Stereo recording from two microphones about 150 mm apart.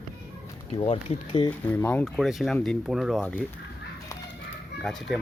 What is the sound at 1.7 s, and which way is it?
Speech, 10° left (ahead or behind).